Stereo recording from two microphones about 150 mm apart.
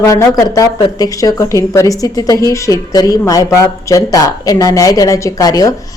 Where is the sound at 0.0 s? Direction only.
20° left (ahead or behind).